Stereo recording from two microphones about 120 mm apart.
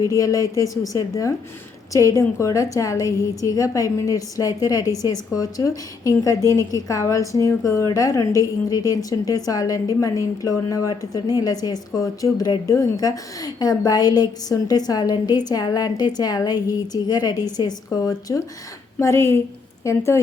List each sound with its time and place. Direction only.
0.0 s a woman's voice: 30° left (ahead or behind)